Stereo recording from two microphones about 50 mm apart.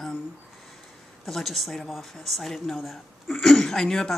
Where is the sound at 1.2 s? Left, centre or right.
Centre.